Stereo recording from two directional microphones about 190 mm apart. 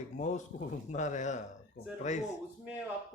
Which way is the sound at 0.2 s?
40° left (ahead or behind).